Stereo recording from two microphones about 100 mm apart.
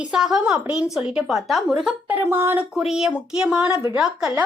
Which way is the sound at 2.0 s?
20° right (ahead or behind).